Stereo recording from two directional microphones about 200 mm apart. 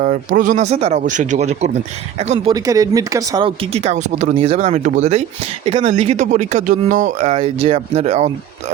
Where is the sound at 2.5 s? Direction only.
15° right (ahead or behind).